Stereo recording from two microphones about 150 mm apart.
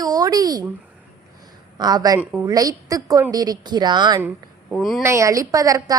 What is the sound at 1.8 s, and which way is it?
A woman's voice, 25° right (ahead or behind).